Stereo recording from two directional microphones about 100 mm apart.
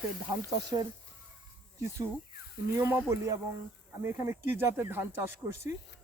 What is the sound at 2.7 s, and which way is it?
Speech, 30° right (ahead or behind).